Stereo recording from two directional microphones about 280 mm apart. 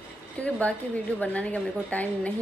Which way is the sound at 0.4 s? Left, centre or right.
Centre.